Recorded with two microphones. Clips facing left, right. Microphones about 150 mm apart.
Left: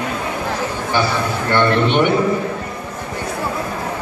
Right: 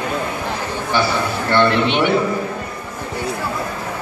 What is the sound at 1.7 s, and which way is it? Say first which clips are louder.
Speech: left 2 dB; 50° left (ahead or behind).